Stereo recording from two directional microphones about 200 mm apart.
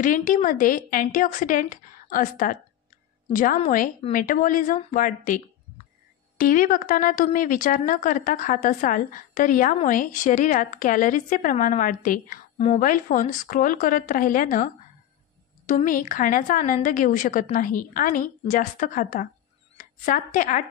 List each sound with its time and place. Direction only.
0.0 s a woman's voice: 40° left (ahead or behind)
4.1 s a woman's voice: 40° left (ahead or behind)